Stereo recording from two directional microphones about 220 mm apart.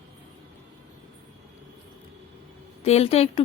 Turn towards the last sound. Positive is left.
turn(degrees=30)  # may be behind; listen again after turning